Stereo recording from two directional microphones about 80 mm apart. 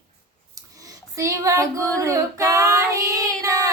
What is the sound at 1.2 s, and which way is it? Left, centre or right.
Female singing, right.